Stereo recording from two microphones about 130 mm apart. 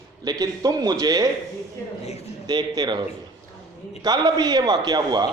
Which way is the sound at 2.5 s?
35° right (ahead or behind).